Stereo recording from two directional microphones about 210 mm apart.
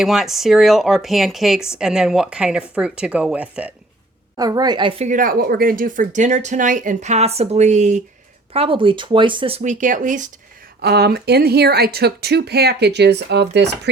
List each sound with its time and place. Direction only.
0.0 s speech: centre (ahead or behind)
4.4 s a woman's voice: 20° right (ahead or behind); by 10.2 s 35° right (ahead or behind)
10.8 s speech: 50° right (ahead or behind)